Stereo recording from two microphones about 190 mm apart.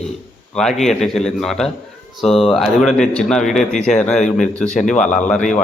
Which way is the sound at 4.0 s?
5° left (ahead or behind).